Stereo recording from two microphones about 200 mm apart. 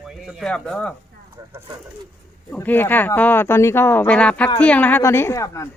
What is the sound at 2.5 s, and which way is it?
Speech, 10° left (ahead or behind).